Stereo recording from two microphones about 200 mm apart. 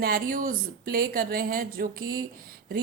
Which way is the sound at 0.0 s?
45° right (ahead or behind).